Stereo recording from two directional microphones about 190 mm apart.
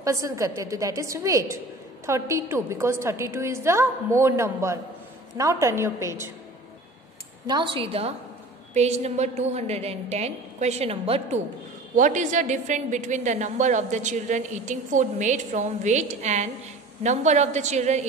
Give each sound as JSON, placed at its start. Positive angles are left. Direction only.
{"t": 0.0, "sound": "a woman's voice", "side_deg": -15}
{"t": 7.4, "sound": "a woman's voice", "side_deg": -25}